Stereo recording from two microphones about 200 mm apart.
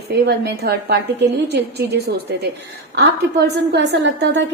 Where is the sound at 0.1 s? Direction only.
55° right (ahead or behind).